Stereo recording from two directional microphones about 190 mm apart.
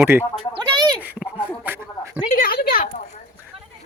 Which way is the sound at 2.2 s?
50° left (ahead or behind).